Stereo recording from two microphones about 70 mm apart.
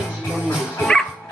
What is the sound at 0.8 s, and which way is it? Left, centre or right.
Dog, centre.